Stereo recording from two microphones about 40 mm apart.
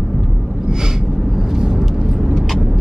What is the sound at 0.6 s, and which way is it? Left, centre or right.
Snort, centre.